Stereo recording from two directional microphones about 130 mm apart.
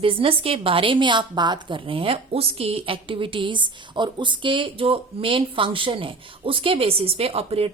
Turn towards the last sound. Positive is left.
turn(degrees=-50)  # may be behind; listen again after turning